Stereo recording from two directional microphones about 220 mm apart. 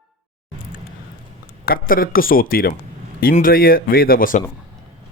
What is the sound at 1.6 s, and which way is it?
Speech, 40° left (ahead or behind).